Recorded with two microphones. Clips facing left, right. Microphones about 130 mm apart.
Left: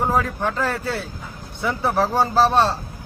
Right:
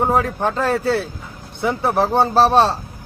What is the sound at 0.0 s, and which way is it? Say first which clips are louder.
Speech: right 3 dB; 25° right (ahead or behind).